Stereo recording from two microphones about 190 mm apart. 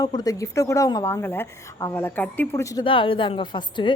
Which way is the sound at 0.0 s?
20° left (ahead or behind).